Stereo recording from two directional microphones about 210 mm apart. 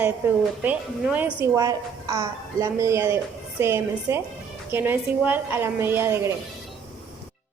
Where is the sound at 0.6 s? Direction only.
10° right (ahead or behind).